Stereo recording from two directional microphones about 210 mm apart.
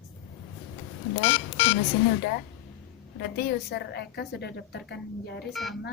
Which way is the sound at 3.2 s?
50° left (ahead or behind).